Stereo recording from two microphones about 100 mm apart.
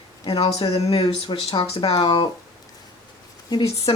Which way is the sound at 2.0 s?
55° left (ahead or behind).